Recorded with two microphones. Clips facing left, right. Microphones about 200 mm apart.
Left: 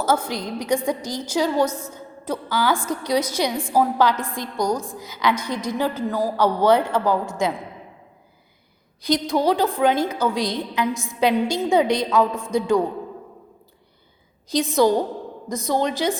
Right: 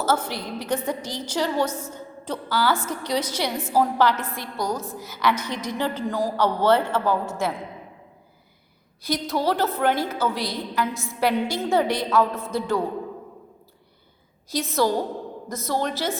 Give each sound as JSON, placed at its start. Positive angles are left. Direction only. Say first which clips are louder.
{"t": 0.0, "sound": "a woman's voice", "louder": "left 2 dB", "side_deg": 10}
{"t": 1.6, "sound": "a woman's voice", "louder": "left 3 dB", "side_deg": -10}
{"t": 1.9, "sound": "a woman's voice", "louder": "left 3 dB", "side_deg": 10}
{"t": 9.0, "sound": "a woman's voice", "louder": "left 4 dB", "side_deg": 15}
{"t": 14.5, "sound": "a woman's voice", "louder": "left 5 dB", "side_deg": 15}